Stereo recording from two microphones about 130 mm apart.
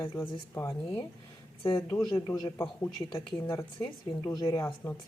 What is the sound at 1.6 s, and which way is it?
Speech, 45° left (ahead or behind).